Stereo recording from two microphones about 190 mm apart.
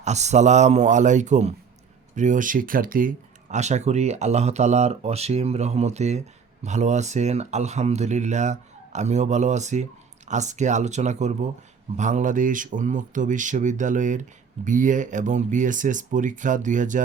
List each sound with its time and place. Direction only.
0.0 s speech: 35° right (ahead or behind)